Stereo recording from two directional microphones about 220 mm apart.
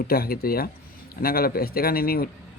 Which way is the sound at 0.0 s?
45° left (ahead or behind).